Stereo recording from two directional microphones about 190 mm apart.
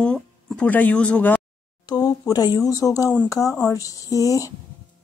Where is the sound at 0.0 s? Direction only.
5° left (ahead or behind).